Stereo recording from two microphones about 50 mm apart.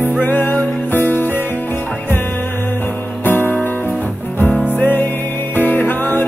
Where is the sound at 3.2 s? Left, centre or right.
Left.